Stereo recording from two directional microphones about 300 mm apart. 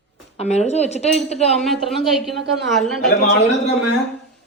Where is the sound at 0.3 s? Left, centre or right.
Left.